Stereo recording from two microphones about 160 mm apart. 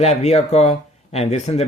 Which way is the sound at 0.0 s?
45° left (ahead or behind).